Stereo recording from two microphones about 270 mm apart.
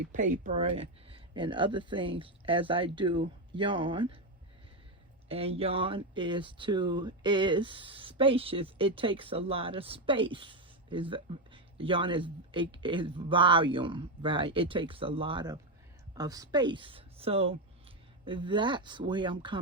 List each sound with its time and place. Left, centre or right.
0.0 s speech: right
5.3 s speech: right